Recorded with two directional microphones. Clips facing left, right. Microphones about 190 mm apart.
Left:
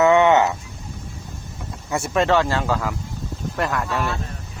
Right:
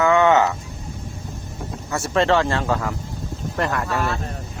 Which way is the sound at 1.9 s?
15° left (ahead or behind).